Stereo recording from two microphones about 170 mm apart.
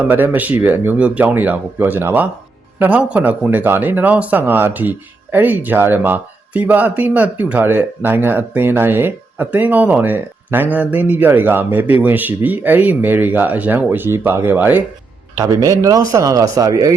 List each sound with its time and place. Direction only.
0.0 s a man's voice: 10° right (ahead or behind)